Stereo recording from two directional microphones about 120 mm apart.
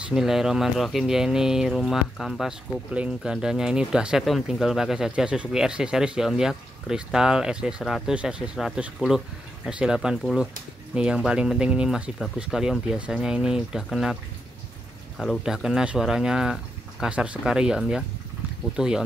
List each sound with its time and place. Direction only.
0.1 s speech: 5° right (ahead or behind)
15.1 s speech: centre (ahead or behind)